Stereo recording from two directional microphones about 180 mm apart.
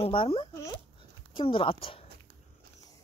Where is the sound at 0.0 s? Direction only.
30° left (ahead or behind).